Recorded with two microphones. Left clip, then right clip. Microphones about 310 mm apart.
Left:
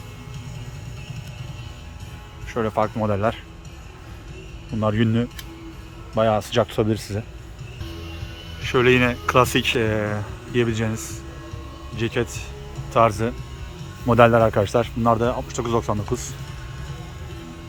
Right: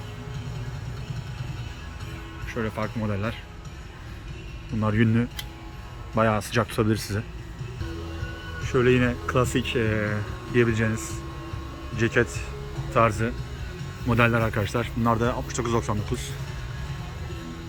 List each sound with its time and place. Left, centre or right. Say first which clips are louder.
2.5 s speech: left 8 dB; centre
4.8 s speech: left 3 dB; centre
8.6 s speech: left 4 dB; centre